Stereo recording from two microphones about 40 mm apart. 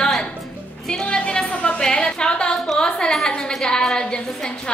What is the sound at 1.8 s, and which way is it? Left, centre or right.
Speech, left.